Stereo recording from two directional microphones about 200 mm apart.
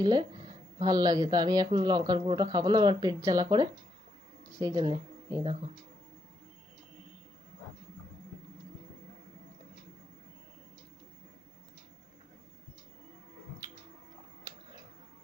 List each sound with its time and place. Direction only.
0.0 s speech: 20° right (ahead or behind)
4.5 s speech: 20° right (ahead or behind)